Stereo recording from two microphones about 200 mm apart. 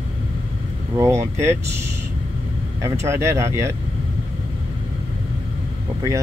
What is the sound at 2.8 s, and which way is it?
Speech, 15° right (ahead or behind).